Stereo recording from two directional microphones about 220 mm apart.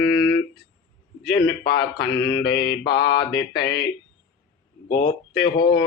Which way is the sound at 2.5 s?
50° left (ahead or behind).